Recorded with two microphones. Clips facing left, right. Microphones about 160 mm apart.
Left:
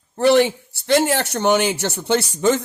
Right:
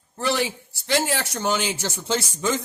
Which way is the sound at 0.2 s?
65° left (ahead or behind).